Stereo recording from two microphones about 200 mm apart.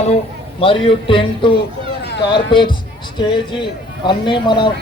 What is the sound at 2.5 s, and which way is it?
A man's voice, 25° left (ahead or behind).